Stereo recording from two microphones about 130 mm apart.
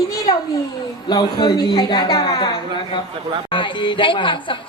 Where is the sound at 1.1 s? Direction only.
35° left (ahead or behind).